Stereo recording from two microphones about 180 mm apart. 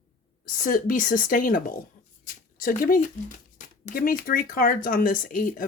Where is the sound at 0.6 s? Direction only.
50° left (ahead or behind).